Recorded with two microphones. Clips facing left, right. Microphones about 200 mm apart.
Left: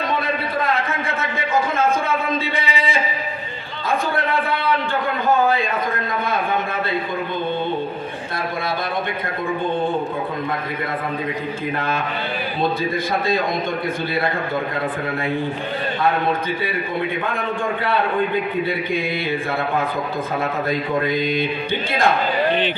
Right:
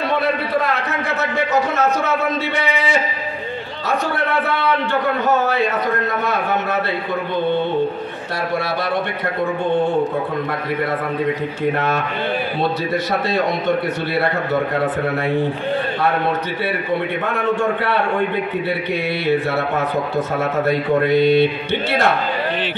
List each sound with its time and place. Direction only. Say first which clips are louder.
2.5 s a sound: right 4 dB; 70° right (ahead or behind)
12.9 s a man's voice: right 1 dB; 75° right (ahead or behind)
17.3 s a man's voice: right 5 dB; 75° right (ahead or behind)
20.6 s a man's voice: right 6 dB; 70° right (ahead or behind)